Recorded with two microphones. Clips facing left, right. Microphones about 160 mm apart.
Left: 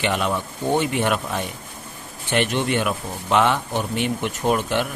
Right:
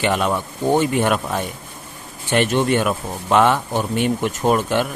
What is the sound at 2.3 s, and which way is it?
Speech, 45° right (ahead or behind).